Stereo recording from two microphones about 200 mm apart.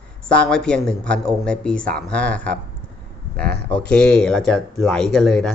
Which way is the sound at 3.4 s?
55° right (ahead or behind).